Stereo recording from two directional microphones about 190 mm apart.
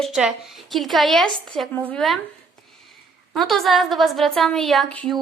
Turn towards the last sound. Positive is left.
turn(degrees=5)  # may be behind; listen again after turning